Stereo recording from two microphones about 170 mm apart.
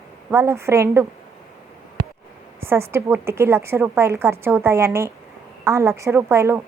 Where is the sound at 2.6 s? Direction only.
15° right (ahead or behind).